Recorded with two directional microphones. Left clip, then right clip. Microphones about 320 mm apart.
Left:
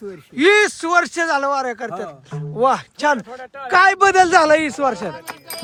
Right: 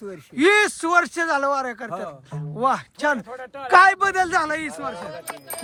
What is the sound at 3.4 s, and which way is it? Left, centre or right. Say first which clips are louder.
Speech: left 2 dB; right.